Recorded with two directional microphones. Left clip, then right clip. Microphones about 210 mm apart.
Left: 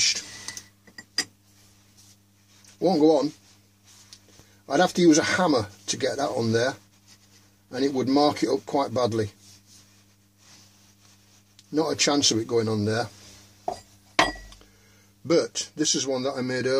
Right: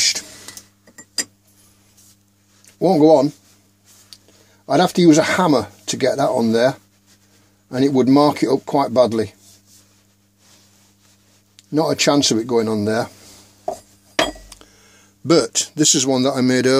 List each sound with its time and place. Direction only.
2.8 s speech: 35° right (ahead or behind)
4.6 s speech: 35° right (ahead or behind)
11.5 s speech: 35° right (ahead or behind)
15.2 s a man's voice: 40° right (ahead or behind)